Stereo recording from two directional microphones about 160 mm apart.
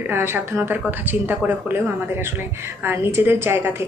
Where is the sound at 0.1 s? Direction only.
15° right (ahead or behind).